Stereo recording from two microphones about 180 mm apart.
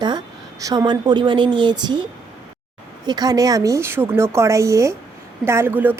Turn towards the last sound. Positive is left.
turn(degrees=-10)  # may be behind; listen again after turning